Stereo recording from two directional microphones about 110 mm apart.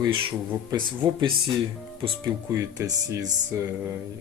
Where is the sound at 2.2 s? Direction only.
30° right (ahead or behind).